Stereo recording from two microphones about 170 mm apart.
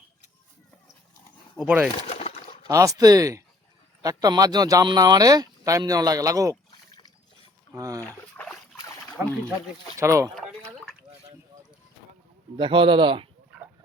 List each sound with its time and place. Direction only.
1.5 s speech: 5° right (ahead or behind)
2.0 s a sound: 35° left (ahead or behind)
2.6 s speech: 20° right (ahead or behind)
7.7 s speech: 20° right (ahead or behind)
8.4 s boat: 10° left (ahead or behind)
9.2 s speech: 10° right (ahead or behind)
10.3 s a sound: 5° left (ahead or behind)
12.5 s speech: 30° right (ahead or behind)